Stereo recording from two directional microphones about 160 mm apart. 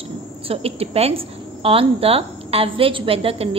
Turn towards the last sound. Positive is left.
turn(degrees=-35)  # may be behind; listen again after turning